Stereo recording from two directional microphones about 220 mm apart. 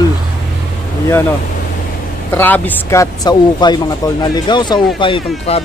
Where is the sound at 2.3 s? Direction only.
10° left (ahead or behind).